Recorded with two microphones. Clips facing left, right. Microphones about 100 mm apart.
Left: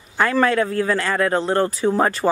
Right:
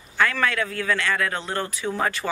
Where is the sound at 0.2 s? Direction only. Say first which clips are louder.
Left 5 dB; 35° left (ahead or behind).